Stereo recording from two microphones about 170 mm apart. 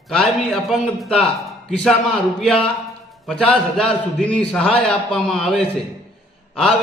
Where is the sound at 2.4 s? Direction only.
5° left (ahead or behind).